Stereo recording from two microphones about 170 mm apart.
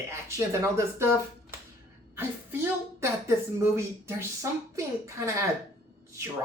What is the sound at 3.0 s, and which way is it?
Speech, 15° right (ahead or behind).